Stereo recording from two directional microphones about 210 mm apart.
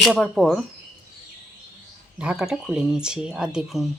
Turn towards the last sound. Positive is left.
turn(degrees=0)  # may be behind; listen again after turning